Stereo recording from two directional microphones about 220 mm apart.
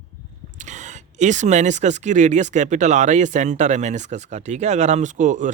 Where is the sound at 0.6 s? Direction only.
35° right (ahead or behind).